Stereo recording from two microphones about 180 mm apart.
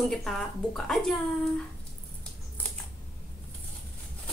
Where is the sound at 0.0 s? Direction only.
Centre (ahead or behind).